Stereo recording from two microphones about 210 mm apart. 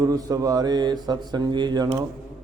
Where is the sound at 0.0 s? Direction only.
15° right (ahead or behind).